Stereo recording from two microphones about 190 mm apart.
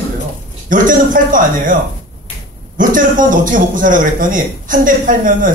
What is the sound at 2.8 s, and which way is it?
A man's voice, 45° right (ahead or behind).